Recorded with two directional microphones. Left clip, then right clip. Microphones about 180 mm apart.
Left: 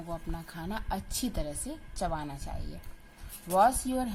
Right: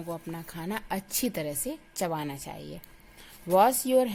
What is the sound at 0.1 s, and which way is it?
A woman's voice, 45° right (ahead or behind).